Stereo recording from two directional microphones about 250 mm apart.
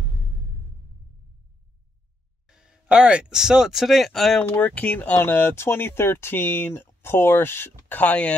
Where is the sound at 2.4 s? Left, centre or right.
Centre.